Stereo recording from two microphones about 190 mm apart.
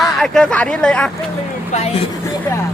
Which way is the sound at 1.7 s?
35° left (ahead or behind).